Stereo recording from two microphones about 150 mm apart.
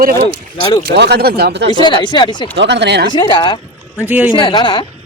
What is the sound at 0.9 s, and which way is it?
Speech, 90° right.